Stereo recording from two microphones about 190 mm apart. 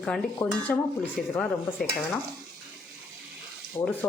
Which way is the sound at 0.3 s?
10° left (ahead or behind).